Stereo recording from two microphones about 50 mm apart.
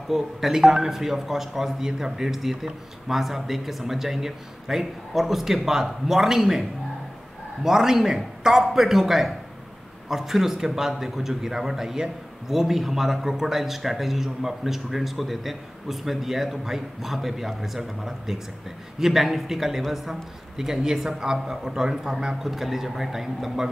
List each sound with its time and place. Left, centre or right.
0.1 s a man's voice: centre
7.6 s a man's voice: centre